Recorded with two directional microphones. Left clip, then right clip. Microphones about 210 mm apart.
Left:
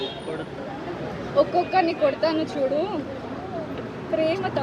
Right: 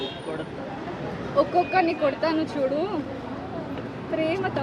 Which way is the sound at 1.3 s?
10° right (ahead or behind).